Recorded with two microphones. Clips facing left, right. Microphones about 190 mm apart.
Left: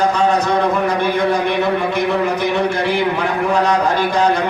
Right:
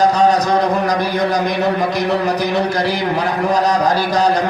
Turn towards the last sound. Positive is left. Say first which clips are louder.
# even
turn(degrees=-35)  # may be behind; listen again after turning